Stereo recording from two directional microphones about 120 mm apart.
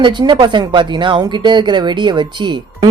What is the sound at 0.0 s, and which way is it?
Speech, 40° right (ahead or behind).